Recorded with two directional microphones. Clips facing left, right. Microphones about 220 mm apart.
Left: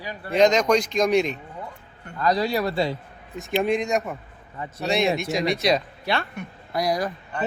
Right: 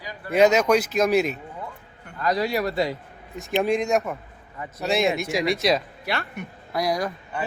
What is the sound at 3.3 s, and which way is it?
Speech, centre (ahead or behind).